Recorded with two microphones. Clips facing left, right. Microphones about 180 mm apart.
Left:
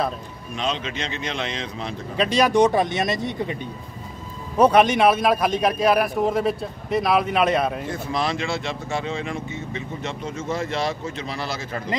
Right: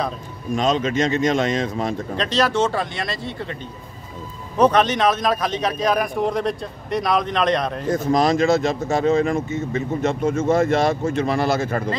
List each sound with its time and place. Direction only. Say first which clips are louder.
0.6 s speech: right 8 dB; 45° right (ahead or behind)
2.1 s a man's voice: left 3 dB; 10° left (ahead or behind)
4.6 s a man's voice: left 1 dB; 10° left (ahead or behind)
7.9 s speech: right 8 dB; 45° right (ahead or behind)